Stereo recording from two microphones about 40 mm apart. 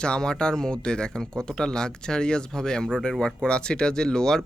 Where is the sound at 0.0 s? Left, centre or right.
Left.